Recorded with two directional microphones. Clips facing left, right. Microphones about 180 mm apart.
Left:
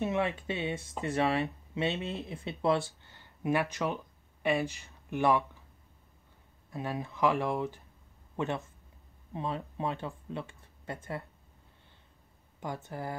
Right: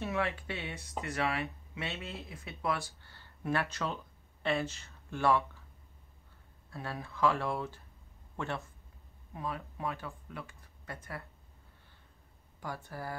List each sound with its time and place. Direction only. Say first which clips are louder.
0.0 s speech: left 4 dB; 20° left (ahead or behind)
3.0 s speech: left 5 dB; 20° left (ahead or behind)
6.7 s speech: left 5 dB; 15° left (ahead or behind)
12.5 s speech: left 3 dB; 20° left (ahead or behind)